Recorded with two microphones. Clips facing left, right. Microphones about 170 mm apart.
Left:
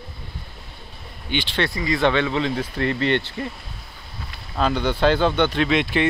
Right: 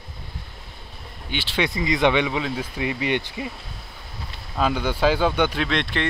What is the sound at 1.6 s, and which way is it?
Speech, 20° right (ahead or behind).